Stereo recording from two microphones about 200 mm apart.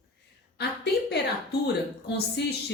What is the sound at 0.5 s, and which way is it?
A woman's voice, 55° left (ahead or behind).